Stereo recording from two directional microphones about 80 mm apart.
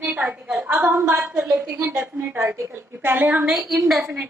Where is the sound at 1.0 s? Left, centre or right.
Right.